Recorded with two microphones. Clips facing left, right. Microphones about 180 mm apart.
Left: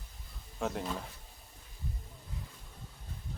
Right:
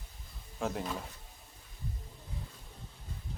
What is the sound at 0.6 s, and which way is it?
Speech, centre (ahead or behind).